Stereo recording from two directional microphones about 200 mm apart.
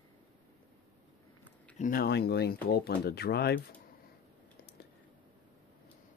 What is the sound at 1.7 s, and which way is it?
Speech, 45° left (ahead or behind).